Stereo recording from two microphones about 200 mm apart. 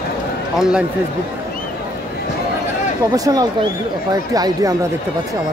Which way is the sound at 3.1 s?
20° right (ahead or behind).